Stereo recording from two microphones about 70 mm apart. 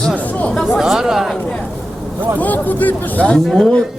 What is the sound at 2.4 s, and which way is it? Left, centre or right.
Speech, left.